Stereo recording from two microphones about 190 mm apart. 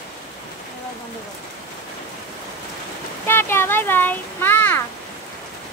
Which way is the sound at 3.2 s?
10° left (ahead or behind).